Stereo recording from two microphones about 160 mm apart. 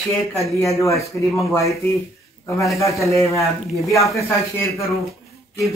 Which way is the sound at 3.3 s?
Centre (ahead or behind).